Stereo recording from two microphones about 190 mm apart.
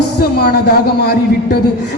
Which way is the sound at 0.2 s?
55° left (ahead or behind).